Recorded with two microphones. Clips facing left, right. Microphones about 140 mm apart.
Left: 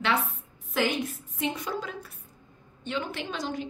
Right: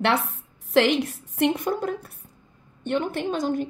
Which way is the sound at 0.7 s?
80° right.